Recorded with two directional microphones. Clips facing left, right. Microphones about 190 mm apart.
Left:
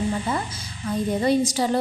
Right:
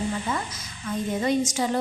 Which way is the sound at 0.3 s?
30° left (ahead or behind).